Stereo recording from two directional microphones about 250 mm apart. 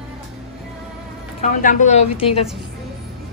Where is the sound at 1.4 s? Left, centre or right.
Left.